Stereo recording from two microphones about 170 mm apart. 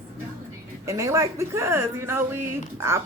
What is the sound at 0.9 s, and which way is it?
A woman's voice, 20° right (ahead or behind).